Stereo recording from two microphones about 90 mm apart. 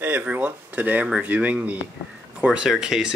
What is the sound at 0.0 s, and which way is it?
Speech, 20° right (ahead or behind).